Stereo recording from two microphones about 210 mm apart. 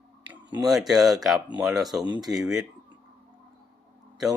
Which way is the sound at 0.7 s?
Centre (ahead or behind).